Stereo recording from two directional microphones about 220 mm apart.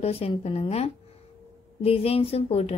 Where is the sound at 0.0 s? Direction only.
25° left (ahead or behind).